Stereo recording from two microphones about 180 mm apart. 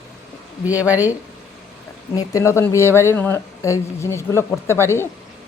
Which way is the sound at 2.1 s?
15° left (ahead or behind).